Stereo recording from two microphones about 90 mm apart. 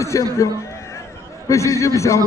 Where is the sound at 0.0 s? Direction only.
35° left (ahead or behind).